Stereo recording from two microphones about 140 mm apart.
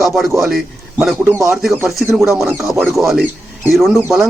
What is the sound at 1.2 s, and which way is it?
A man's voice, 20° right (ahead or behind).